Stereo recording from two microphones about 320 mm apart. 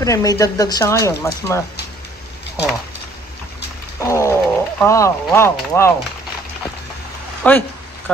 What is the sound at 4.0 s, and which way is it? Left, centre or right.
Roaring cats, centre.